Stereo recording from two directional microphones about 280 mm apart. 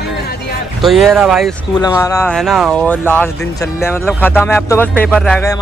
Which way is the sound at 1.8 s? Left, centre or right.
Centre.